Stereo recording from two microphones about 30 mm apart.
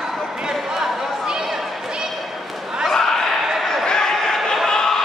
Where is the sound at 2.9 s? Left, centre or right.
Centre.